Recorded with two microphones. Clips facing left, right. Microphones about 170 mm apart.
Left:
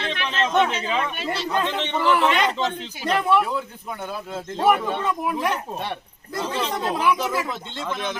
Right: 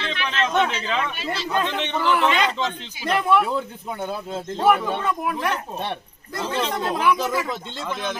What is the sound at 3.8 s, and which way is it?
Speech, 25° right (ahead or behind).